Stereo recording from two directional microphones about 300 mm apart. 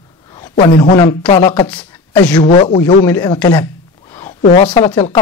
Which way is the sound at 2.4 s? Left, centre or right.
Centre.